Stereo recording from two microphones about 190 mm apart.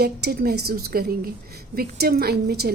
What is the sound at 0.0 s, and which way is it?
A woman's voice, 55° right (ahead or behind).